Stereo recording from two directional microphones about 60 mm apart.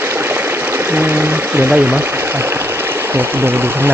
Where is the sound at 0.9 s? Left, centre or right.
Right.